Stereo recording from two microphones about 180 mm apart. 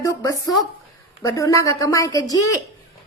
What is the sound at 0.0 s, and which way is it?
A woman's voice, 20° left (ahead or behind).